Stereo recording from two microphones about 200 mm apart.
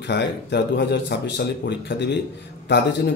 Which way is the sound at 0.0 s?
60° left (ahead or behind).